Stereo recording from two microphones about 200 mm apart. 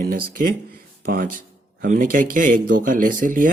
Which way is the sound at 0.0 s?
45° right (ahead or behind).